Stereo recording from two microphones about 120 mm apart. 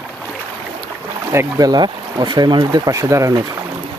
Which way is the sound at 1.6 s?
35° right (ahead or behind).